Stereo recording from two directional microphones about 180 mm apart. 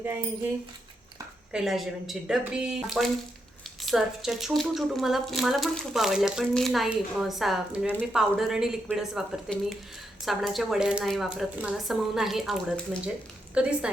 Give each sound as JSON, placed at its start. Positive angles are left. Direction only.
{"t": 1.5, "sound": "speech", "side_deg": 0}